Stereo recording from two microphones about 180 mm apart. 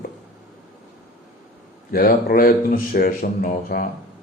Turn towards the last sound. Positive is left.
turn(degrees=55)  # may be behind; listen again after turning